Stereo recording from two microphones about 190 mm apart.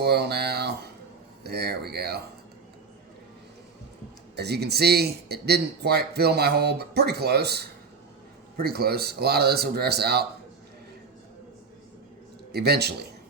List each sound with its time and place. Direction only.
0.0 s a sound: 60° right (ahead or behind)
1.5 s a man's voice: 60° right (ahead or behind)
4.4 s a man's voice: 60° right (ahead or behind)
12.5 s a man's voice: 55° right (ahead or behind)